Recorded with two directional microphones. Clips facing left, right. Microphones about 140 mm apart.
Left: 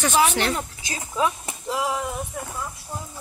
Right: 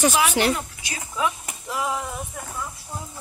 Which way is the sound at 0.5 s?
30° left (ahead or behind).